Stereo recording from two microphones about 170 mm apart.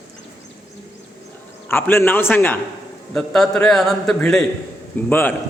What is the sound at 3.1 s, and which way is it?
A man's voice, 5° left (ahead or behind).